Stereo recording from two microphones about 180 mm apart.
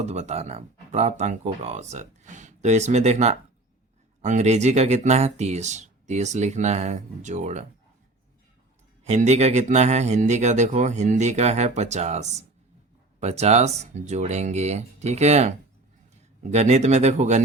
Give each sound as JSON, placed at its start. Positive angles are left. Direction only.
{"t": 0.0, "sound": "speech", "side_deg": -40}
{"t": 9.0, "sound": "speech", "side_deg": -40}